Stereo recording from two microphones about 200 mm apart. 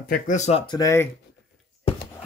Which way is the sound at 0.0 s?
40° left (ahead or behind).